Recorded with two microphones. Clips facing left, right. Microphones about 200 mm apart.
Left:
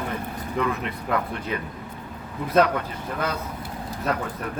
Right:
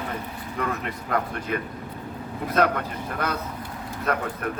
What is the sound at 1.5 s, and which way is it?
Speech, 55° right (ahead or behind).